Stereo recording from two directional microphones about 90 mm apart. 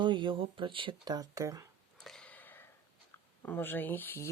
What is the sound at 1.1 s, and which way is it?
Speech, 45° right (ahead or behind).